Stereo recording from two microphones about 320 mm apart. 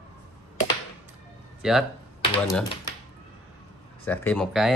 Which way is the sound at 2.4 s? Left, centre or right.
Centre.